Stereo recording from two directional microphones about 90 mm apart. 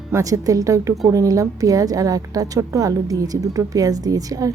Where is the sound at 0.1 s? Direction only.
40° right (ahead or behind).